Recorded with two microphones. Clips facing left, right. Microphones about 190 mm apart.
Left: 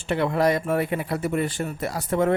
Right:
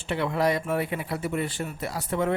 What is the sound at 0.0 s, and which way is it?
A man's voice, 50° left (ahead or behind).